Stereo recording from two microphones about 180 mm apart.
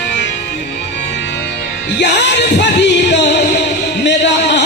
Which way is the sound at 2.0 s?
70° left (ahead or behind).